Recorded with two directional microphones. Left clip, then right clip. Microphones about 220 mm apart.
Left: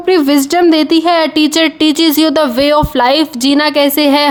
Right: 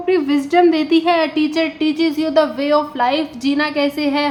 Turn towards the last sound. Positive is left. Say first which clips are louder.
# left 8 dB
turn(degrees=55)  # may be behind; listen again after turning